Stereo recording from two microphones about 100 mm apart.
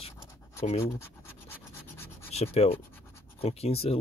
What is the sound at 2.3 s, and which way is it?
Speech, 90° left.